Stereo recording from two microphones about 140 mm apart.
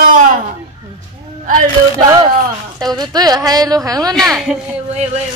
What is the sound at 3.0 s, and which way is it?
A woman's voice, 30° right (ahead or behind).